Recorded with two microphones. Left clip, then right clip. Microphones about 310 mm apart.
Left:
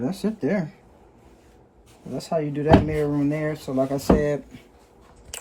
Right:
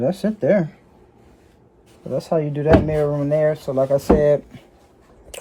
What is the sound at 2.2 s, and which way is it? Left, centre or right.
Speech, right.